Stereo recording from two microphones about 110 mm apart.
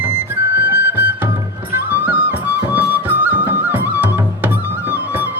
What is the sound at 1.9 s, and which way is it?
Flute, 20° right (ahead or behind).